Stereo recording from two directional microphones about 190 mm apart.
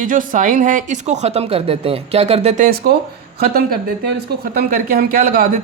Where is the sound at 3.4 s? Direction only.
50° right (ahead or behind).